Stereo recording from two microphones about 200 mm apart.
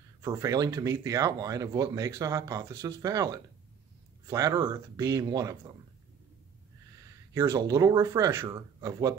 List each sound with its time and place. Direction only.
0.2 s speech: 15° right (ahead or behind)
7.0 s speech: 15° right (ahead or behind)